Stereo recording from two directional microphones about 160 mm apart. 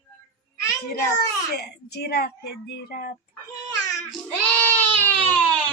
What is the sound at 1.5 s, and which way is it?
Speech, 90° left.